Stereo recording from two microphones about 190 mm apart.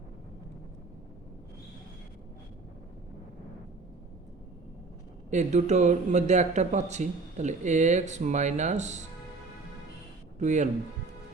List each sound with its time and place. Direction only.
5.3 s speech: 40° right (ahead or behind)
10.3 s speech: 40° right (ahead or behind)